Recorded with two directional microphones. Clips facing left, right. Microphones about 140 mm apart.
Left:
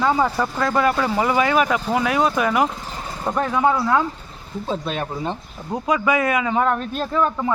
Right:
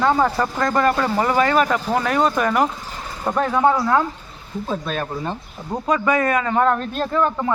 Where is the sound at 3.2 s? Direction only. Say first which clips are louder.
Right 2 dB; 5° right (ahead or behind).